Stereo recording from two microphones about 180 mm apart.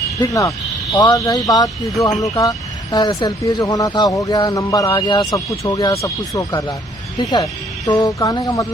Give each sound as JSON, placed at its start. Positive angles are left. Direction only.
{"t": 0.2, "sound": "speech", "side_deg": 20}